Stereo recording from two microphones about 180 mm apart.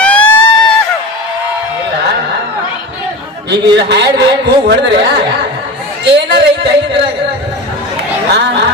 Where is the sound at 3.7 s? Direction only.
70° right (ahead or behind).